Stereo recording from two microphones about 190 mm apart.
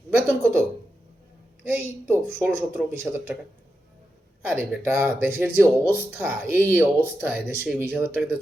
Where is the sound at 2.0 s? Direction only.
10° right (ahead or behind).